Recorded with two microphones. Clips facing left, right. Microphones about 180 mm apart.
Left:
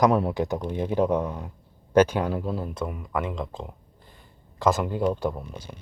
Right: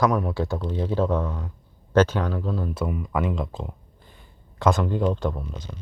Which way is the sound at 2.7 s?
5° right (ahead or behind).